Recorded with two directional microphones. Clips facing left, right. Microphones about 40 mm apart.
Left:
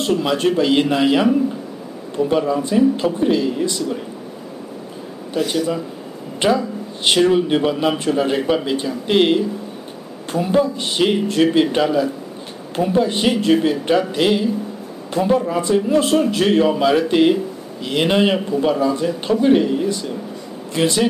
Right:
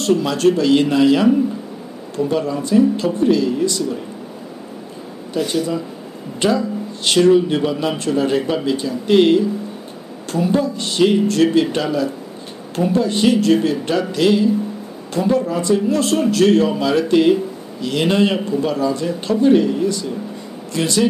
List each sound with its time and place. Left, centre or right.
0.0 s speech: left
5.3 s speech: centre